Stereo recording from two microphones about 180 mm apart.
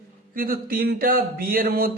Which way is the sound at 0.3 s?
55° right (ahead or behind).